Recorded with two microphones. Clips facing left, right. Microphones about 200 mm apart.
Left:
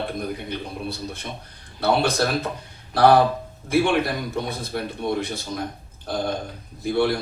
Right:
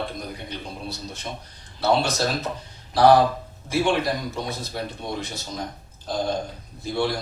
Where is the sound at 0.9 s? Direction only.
55° left (ahead or behind).